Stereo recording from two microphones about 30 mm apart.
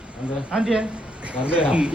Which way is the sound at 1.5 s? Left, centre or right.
Right.